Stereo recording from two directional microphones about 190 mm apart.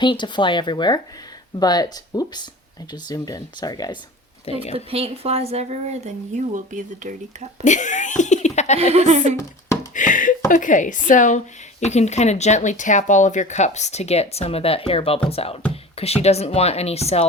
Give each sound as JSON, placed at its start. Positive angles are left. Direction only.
{"t": 0.0, "sound": "speech", "side_deg": 25}
{"t": 4.7, "sound": "speech", "side_deg": -30}
{"t": 7.6, "sound": "speech", "side_deg": 40}
{"t": 8.8, "sound": "speech", "side_deg": -35}
{"t": 9.9, "sound": "speech", "side_deg": 45}